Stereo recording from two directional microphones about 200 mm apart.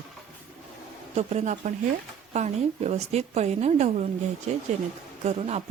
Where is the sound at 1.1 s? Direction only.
35° right (ahead or behind).